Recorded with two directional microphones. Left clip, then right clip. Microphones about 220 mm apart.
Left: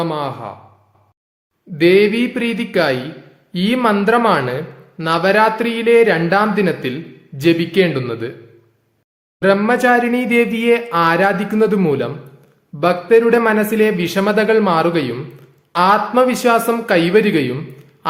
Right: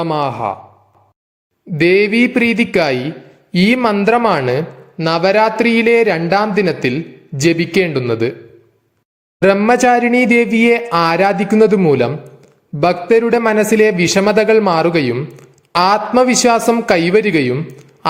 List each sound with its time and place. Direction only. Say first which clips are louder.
0.0 s speech: right 5 dB; 25° right (ahead or behind)
1.7 s speech: even; 25° right (ahead or behind)
9.4 s speech: right 3 dB; 30° right (ahead or behind)
18.0 s a sound: right 2 dB; 30° right (ahead or behind)